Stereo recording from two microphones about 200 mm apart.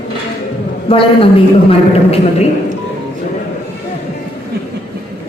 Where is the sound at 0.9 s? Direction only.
25° left (ahead or behind).